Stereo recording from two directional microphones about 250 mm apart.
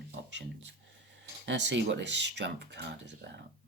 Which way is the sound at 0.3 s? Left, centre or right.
Right.